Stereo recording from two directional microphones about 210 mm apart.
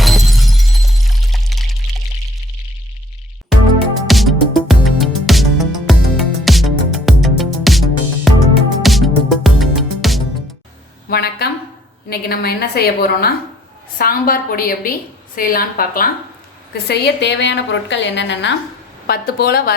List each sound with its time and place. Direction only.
0.0 s shatter: centre (ahead or behind)
4.0 s music: centre (ahead or behind)
11.1 s a sound: 45° left (ahead or behind)
12.0 s a woman's voice: 45° left (ahead or behind)
19.0 s a woman's voice: 45° left (ahead or behind)